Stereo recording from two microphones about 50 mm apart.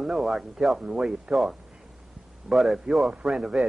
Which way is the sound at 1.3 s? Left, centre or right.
Centre.